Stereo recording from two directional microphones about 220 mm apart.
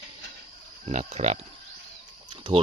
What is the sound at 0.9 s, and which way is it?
Speech, 30° right (ahead or behind).